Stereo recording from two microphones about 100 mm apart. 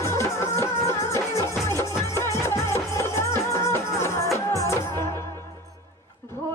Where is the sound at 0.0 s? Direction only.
30° left (ahead or behind).